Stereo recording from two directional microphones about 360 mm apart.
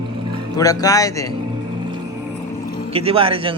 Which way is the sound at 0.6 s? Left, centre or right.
Centre.